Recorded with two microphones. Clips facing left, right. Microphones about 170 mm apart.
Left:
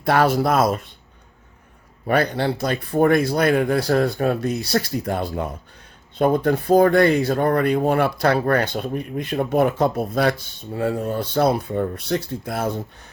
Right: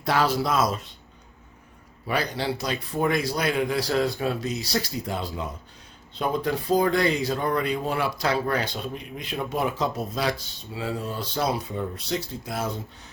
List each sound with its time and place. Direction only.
0.0 s speech: 55° left (ahead or behind)
2.0 s speech: 55° left (ahead or behind)